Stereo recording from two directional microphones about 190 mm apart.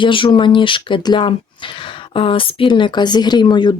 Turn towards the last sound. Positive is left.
turn(degrees=25)  # may be behind; listen again after turning